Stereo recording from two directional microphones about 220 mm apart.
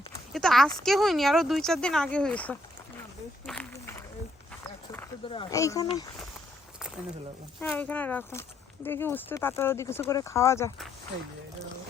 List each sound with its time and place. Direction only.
0.3 s speech: centre (ahead or behind)
3.4 s a sound: 5° left (ahead or behind)
5.3 s speech: 20° left (ahead or behind)
7.6 s speech: 5° left (ahead or behind)